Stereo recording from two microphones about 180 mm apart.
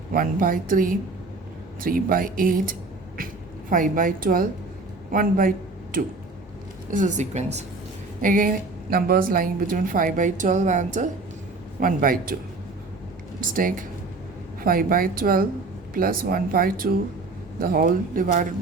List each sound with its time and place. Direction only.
0.1 s a woman's voice: 50° right (ahead or behind)
13.4 s a woman's voice: 50° right (ahead or behind)